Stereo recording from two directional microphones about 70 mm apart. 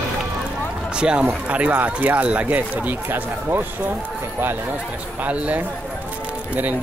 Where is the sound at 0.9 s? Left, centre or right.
Centre; by 3.7 s right.